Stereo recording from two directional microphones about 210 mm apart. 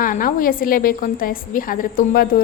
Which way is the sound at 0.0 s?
40° left (ahead or behind).